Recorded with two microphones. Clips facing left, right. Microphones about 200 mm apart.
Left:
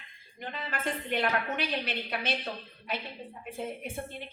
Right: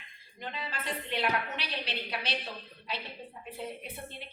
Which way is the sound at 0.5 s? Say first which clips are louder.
Left 4 dB; 50° left (ahead or behind).